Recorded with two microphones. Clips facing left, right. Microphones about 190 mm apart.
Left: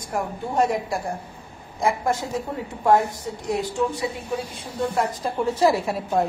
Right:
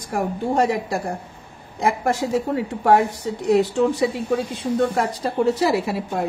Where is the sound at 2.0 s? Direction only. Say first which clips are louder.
Right 4 dB; 80° right.